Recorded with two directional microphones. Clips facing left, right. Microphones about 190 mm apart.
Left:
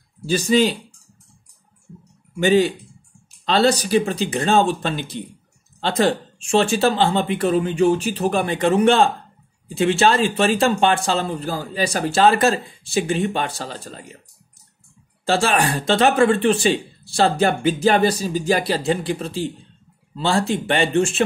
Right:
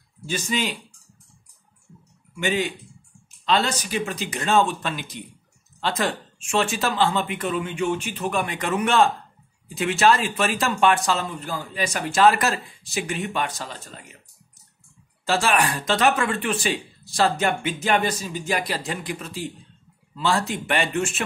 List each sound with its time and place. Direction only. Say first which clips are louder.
0.3 s speech: left 9 dB; 35° left (ahead or behind)
2.3 s speech: left 9 dB; 35° left (ahead or behind)
15.2 s speech: left 3 dB; 30° left (ahead or behind)